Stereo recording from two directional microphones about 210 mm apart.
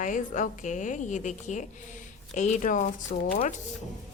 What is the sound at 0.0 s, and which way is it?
A woman's voice, 35° left (ahead or behind).